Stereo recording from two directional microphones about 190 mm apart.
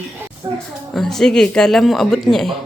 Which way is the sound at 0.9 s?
Centre (ahead or behind).